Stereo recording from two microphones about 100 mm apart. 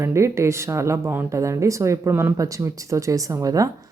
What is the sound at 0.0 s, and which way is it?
Speech, 30° right (ahead or behind).